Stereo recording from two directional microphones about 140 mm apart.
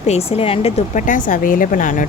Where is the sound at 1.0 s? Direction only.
70° left (ahead or behind).